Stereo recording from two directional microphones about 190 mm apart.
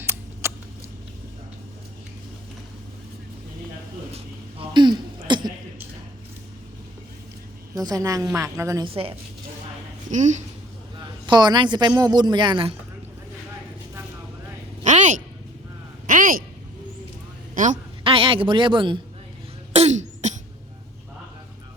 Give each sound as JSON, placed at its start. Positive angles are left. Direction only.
{"t": 0.0, "sound": "scissors", "side_deg": -15}
{"t": 4.7, "sound": "a sound", "side_deg": -25}
{"t": 7.8, "sound": "a woman's voice", "side_deg": -20}
{"t": 8.9, "sound": "a woman's voice", "side_deg": -30}
{"t": 11.3, "sound": "a woman's voice", "side_deg": -25}
{"t": 14.8, "sound": "a sound", "side_deg": -40}
{"t": 17.5, "sound": "a sound", "side_deg": -40}
{"t": 18.0, "sound": "a man's voice", "side_deg": -30}
{"t": 19.7, "sound": "throat clearing", "side_deg": -35}